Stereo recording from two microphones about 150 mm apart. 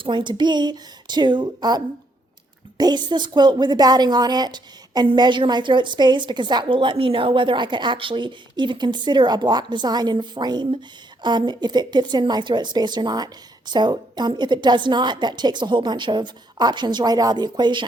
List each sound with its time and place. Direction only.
0.0 s a woman's voice: 30° right (ahead or behind)